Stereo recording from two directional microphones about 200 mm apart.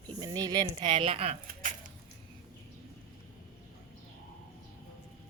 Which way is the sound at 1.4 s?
40° right (ahead or behind).